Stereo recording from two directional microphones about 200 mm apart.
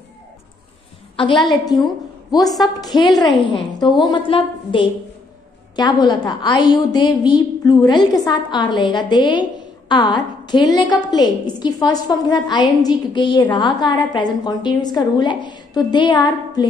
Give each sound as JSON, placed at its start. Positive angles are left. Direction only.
{"t": 1.1, "sound": "a woman's voice", "side_deg": 25}